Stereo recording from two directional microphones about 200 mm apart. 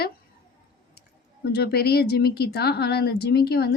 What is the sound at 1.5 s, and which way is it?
A woman's voice, 55° left (ahead or behind).